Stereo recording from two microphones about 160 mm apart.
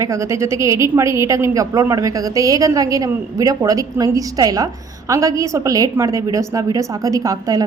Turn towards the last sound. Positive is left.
turn(degrees=-20)  # may be behind; listen again after turning